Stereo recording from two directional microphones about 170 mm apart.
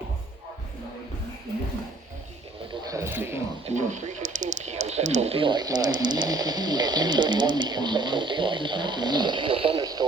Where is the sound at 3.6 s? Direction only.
45° right (ahead or behind).